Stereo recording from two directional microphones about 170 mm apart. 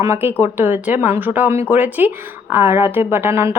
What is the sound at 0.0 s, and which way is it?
A woman's voice, 15° right (ahead or behind).